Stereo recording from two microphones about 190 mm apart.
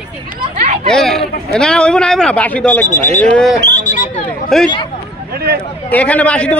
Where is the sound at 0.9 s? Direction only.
Centre (ahead or behind).